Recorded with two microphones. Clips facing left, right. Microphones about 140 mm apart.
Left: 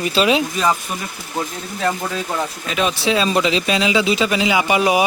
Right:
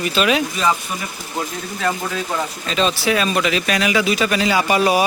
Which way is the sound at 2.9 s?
25° left (ahead or behind).